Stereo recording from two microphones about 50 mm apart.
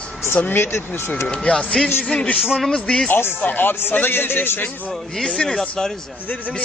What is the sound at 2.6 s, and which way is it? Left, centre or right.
Speech, centre.